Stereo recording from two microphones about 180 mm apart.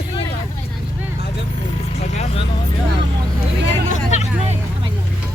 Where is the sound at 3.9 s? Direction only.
40° left (ahead or behind).